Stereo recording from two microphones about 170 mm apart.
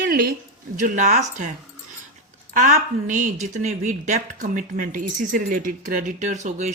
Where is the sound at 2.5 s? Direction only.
50° right (ahead or behind).